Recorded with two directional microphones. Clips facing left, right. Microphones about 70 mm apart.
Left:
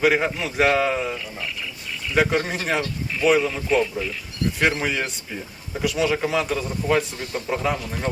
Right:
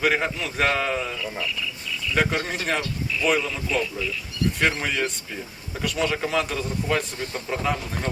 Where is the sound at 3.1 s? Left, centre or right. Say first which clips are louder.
Left 4 dB; left.